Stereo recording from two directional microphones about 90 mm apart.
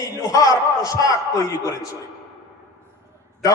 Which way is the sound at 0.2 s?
40° left (ahead or behind).